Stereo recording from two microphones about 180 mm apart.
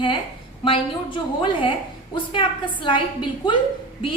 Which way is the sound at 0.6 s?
30° left (ahead or behind).